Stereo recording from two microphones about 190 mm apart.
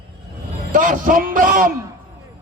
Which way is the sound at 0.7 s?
45° right (ahead or behind).